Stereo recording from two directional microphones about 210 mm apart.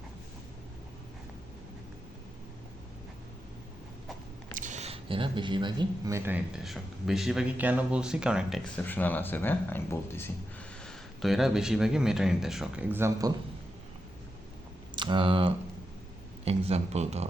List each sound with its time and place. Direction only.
4.5 s speech: 35° right (ahead or behind); by 10.3 s 10° left (ahead or behind)
10.8 s speech: centre (ahead or behind); by 13.3 s 15° right (ahead or behind)
14.9 s speech: 20° right (ahead or behind)